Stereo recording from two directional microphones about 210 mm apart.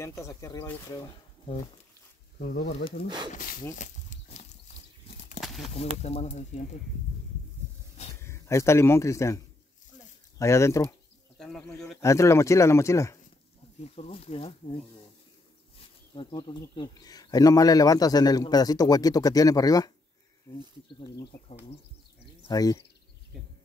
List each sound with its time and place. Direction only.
0.0 s speech: 15° left (ahead or behind)
2.3 s speech: 45° left (ahead or behind)
3.7 s a sound: 35° left (ahead or behind)
5.4 s a sound: centre (ahead or behind)
6.0 s speech: 30° left (ahead or behind)
8.2 s speech: 15° left (ahead or behind)
10.4 s speech: 15° left (ahead or behind)
11.3 s bird: centre (ahead or behind)
12.0 s speech: 15° left (ahead or behind)
13.7 s speech: 30° left (ahead or behind)
16.2 s speech: 25° left (ahead or behind)
22.5 s speech: 15° left (ahead or behind)
23.3 s a sound: centre (ahead or behind)